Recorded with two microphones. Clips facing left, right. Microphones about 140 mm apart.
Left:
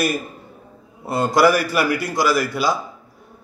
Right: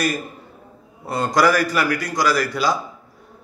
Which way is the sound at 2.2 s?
5° left (ahead or behind).